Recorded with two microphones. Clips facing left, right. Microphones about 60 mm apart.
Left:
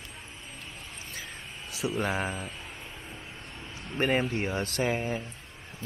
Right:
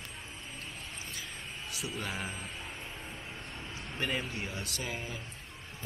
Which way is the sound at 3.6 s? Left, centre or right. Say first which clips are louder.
Left 2 dB; centre.